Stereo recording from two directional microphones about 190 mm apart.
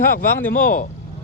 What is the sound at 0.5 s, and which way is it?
Speech, 45° left (ahead or behind).